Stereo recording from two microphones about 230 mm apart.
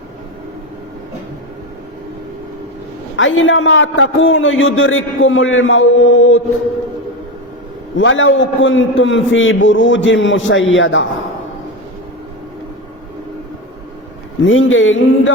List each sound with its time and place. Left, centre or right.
3.2 s a man's voice: left
7.9 s a man's voice: left
14.4 s a man's voice: left